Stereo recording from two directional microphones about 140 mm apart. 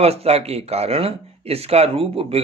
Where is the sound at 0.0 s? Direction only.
45° right (ahead or behind).